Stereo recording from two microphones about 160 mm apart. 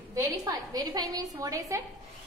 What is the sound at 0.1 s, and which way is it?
A woman's voice, 20° right (ahead or behind).